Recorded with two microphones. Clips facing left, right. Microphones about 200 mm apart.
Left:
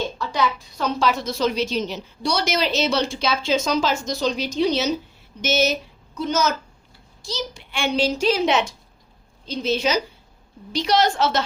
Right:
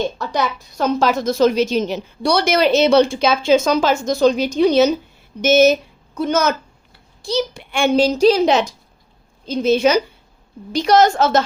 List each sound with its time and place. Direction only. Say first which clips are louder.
0.2 s a woman's voice: right 2 dB; 45° right (ahead or behind)
9.5 s a woman's voice: right 7 dB; 50° right (ahead or behind)